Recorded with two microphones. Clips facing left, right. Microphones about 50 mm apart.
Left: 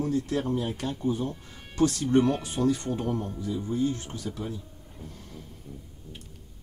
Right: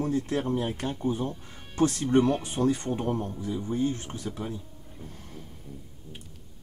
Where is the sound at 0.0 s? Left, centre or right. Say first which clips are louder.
Even; right.